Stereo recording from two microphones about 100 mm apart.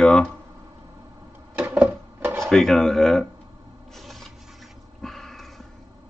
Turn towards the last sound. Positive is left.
turn(degrees=5)  # may be behind; listen again after turning